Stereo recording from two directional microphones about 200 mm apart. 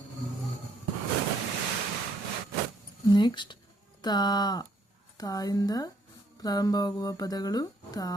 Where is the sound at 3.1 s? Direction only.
20° left (ahead or behind).